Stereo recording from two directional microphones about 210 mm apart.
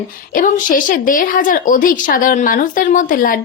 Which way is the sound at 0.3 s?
40° left (ahead or behind).